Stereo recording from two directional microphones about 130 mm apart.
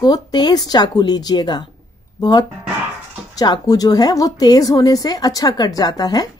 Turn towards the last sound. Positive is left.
turn(degrees=30)  # may be behind; listen again after turning